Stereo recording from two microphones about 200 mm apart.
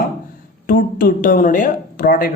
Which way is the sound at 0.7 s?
45° left (ahead or behind).